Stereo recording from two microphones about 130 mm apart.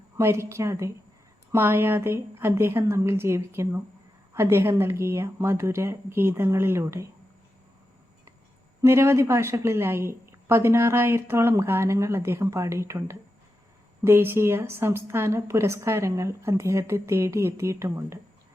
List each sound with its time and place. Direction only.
0.2 s a woman's voice: 20° right (ahead or behind)
8.8 s a woman's voice: 20° right (ahead or behind)